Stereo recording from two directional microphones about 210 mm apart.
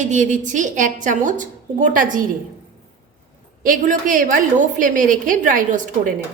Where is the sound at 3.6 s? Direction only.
40° right (ahead or behind).